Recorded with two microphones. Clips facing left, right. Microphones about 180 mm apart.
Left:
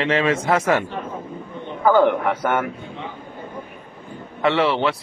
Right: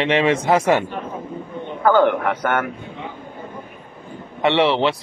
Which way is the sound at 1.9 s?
5° left (ahead or behind).